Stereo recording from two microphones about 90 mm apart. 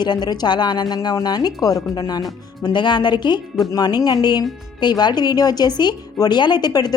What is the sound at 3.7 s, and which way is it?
A woman's voice, 45° left (ahead or behind).